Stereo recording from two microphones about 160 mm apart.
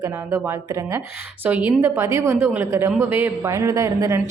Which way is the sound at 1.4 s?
10° right (ahead or behind).